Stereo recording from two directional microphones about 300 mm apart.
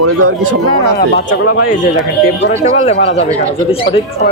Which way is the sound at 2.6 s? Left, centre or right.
Left.